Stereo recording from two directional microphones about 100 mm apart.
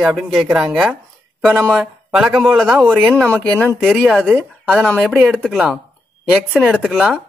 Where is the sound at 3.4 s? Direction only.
5° left (ahead or behind).